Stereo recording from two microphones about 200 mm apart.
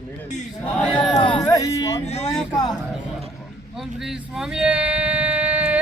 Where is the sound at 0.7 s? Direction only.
5° left (ahead or behind).